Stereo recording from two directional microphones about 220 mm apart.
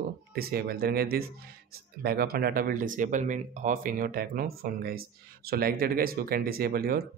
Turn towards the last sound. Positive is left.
turn(degrees=-45)  # may be behind; listen again after turning